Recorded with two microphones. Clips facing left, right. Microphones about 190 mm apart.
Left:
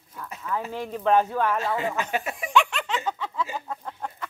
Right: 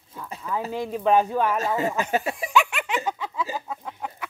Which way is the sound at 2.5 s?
10° right (ahead or behind).